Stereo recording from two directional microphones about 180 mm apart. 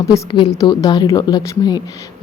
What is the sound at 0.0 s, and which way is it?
Speech, 20° left (ahead or behind).